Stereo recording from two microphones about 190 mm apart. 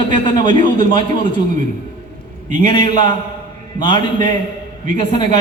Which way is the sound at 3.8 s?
25° left (ahead or behind).